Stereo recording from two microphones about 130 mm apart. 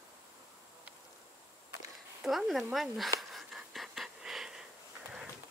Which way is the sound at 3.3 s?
Centre (ahead or behind).